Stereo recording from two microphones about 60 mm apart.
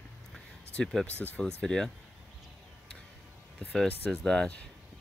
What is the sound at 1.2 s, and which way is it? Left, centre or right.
Speech, centre.